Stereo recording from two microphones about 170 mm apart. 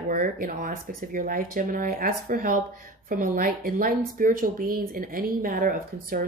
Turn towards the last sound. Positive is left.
turn(degrees=-60)  # may be behind; listen again after turning